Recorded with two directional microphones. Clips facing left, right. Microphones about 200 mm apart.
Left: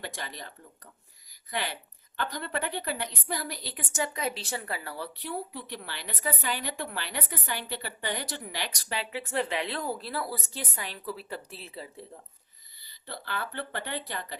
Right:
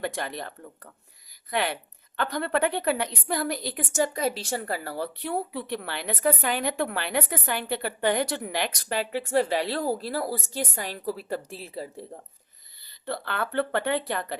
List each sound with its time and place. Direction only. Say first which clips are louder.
0.0 s a woman's voice: right 8 dB; 55° right (ahead or behind)
13.2 s speech: right 8 dB; 60° right (ahead or behind)